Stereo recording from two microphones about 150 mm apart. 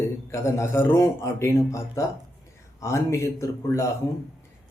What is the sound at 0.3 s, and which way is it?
Speech, 20° left (ahead or behind).